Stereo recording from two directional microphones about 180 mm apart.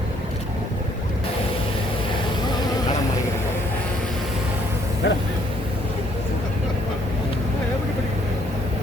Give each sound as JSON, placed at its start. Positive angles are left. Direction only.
{"t": 5.0, "sound": "vehicle", "side_deg": 70}